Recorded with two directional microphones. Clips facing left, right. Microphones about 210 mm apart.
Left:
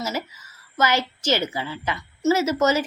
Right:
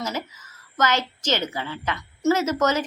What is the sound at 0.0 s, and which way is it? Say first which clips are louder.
A woman's voice: left 1 dB; 10° left (ahead or behind).